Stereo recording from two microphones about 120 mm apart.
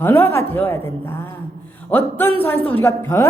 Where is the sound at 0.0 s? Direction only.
20° left (ahead or behind).